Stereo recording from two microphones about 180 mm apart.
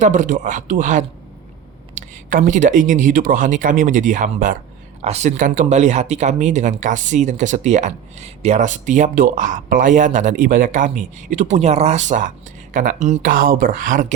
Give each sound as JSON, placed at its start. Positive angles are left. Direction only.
{"t": 0.0, "sound": "speech", "side_deg": -40}